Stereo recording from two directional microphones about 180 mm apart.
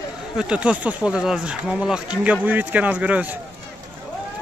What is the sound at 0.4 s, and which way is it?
Speech, 5° right (ahead or behind).